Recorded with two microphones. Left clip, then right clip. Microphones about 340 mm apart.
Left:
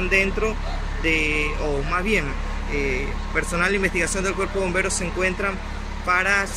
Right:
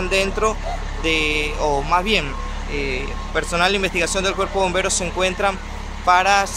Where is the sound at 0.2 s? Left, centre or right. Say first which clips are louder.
Right 3 dB; right.